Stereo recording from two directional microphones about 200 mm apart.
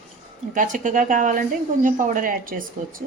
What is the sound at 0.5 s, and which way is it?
Speech, 40° right (ahead or behind).